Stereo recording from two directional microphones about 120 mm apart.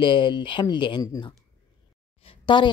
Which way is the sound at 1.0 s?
30° left (ahead or behind).